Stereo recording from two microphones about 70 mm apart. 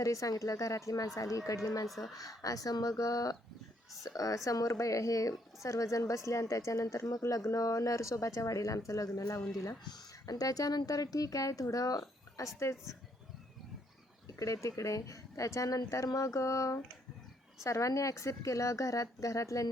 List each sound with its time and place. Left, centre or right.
0.0 s a woman's voice: left
9.8 s speech: left
14.3 s a woman's voice: left